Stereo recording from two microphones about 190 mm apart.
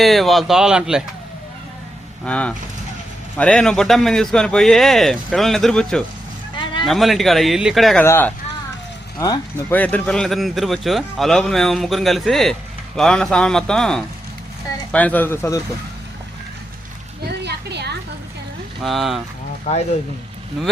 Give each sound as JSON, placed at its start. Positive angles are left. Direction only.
{"t": 0.0, "sound": "a man's voice", "side_deg": 0}
{"t": 2.2, "sound": "a man's voice", "side_deg": 5}
{"t": 8.0, "sound": "speech", "side_deg": 10}
{"t": 9.7, "sound": "a man's voice", "side_deg": 10}
{"t": 17.4, "sound": "a sound", "side_deg": -60}
{"t": 18.8, "sound": "a man's voice", "side_deg": 0}
{"t": 19.7, "sound": "speech", "side_deg": 35}